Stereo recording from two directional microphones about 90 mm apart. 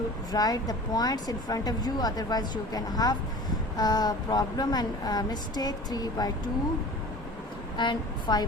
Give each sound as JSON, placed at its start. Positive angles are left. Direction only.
{"t": 0.3, "sound": "a woman's voice", "side_deg": 45}
{"t": 7.8, "sound": "a woman's voice", "side_deg": 55}